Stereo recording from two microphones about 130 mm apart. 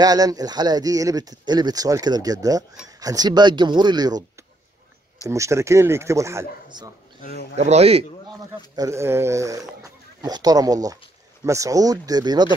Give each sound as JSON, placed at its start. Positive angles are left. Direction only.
{"t": 0.0, "sound": "speech", "side_deg": -30}
{"t": 5.3, "sound": "speech", "side_deg": -20}
{"t": 7.5, "sound": "a man's voice", "side_deg": -55}
{"t": 8.7, "sound": "speech", "side_deg": -25}